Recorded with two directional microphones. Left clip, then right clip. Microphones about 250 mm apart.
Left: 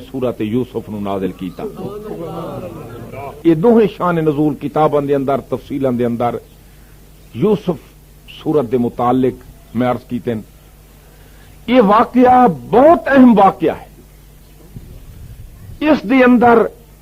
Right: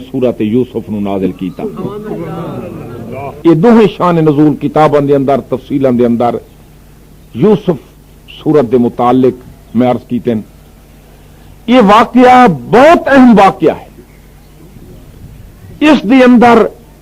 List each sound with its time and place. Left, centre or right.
0.1 s a man's voice: right
1.2 s a man's voice: centre
1.9 s speech: right
3.2 s a man's voice: right
11.6 s a man's voice: right
16.0 s a man's voice: right